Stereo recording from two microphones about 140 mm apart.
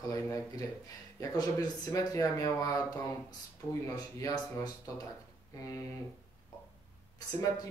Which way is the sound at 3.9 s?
30° left (ahead or behind).